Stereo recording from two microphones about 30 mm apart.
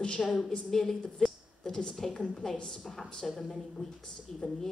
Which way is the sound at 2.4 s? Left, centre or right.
Centre.